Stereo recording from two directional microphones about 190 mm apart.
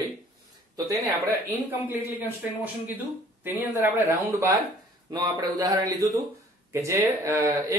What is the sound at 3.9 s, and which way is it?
Speech, 15° right (ahead or behind).